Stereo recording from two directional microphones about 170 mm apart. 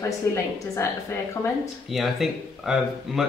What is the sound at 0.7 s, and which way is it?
Speech, 15° left (ahead or behind).